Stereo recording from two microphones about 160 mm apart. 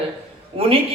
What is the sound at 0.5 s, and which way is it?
Speech, 35° right (ahead or behind).